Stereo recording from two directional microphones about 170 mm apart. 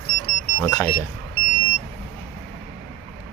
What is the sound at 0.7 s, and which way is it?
Speech, 5° left (ahead or behind).